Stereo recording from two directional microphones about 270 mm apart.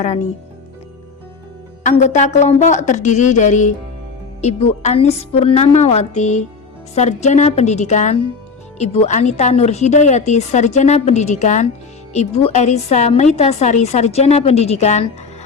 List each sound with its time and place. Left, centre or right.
0.0 s a woman's voice: left
1.8 s a woman's voice: left